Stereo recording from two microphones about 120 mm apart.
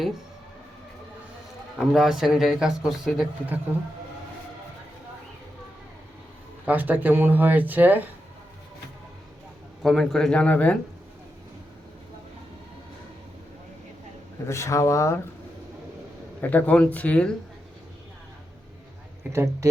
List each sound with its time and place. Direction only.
1.8 s a man's voice: 5° right (ahead or behind)
6.7 s speech: 15° right (ahead or behind)
9.8 s a man's voice: centre (ahead or behind)
14.4 s speech: 25° left (ahead or behind)
16.4 s speech: 15° left (ahead or behind)
19.3 s speech: 20° right (ahead or behind)